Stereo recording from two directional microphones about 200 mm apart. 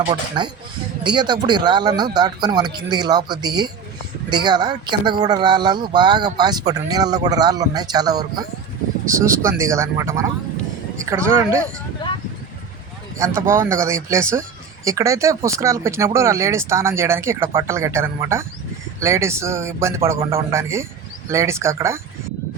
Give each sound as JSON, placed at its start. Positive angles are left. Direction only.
{"t": 0.0, "sound": "speech", "side_deg": -25}
{"t": 13.1, "sound": "speech", "side_deg": -15}